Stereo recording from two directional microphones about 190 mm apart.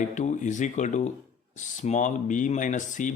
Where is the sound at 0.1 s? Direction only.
40° left (ahead or behind).